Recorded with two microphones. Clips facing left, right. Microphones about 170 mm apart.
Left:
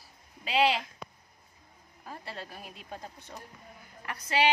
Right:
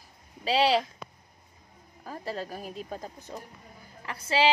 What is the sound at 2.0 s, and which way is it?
A woman's voice, 40° right (ahead or behind).